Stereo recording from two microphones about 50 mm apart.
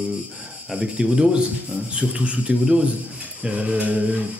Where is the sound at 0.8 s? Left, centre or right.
Right.